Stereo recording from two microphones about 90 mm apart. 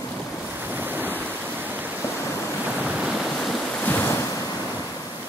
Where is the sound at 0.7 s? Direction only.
20° right (ahead or behind).